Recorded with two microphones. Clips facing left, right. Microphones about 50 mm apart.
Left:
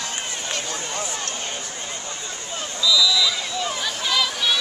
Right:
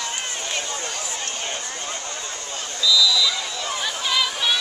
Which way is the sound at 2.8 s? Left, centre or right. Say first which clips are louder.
Even; centre.